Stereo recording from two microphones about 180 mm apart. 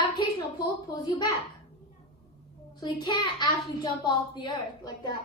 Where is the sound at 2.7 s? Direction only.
25° left (ahead or behind).